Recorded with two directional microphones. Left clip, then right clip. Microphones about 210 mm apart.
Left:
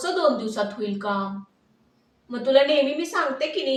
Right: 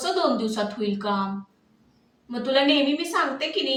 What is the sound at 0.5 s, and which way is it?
Speech, 10° left (ahead or behind).